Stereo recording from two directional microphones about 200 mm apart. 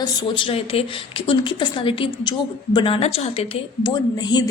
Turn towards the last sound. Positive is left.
turn(degrees=20)  # may be behind; listen again after turning